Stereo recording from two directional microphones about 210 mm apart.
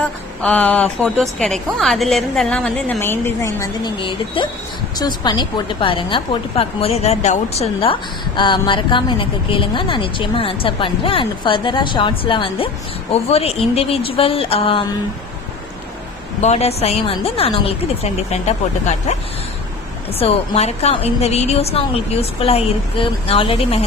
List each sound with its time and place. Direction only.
0.4 s a woman's voice: 5° left (ahead or behind); by 14.8 s 25° left (ahead or behind)
16.4 s a woman's voice: 30° left (ahead or behind)
20.1 s a woman's voice: 30° left (ahead or behind)